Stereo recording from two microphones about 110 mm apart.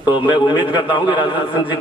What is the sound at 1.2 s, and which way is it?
Speech, 50° left (ahead or behind).